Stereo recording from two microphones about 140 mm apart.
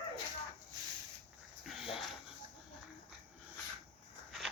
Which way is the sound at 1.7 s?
Centre (ahead or behind).